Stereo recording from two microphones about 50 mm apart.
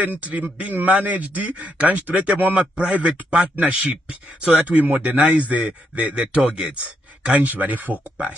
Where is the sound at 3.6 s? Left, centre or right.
Right.